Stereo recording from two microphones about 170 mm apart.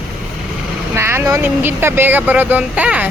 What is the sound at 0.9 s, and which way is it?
Speech, 15° right (ahead or behind).